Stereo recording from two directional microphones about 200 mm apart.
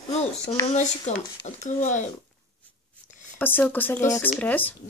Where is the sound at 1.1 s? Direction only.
35° left (ahead or behind).